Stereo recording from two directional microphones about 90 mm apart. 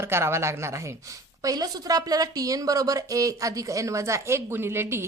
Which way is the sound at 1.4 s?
45° right (ahead or behind).